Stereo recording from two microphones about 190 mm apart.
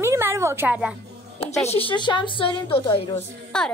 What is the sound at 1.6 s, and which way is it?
A woman's voice, 35° left (ahead or behind).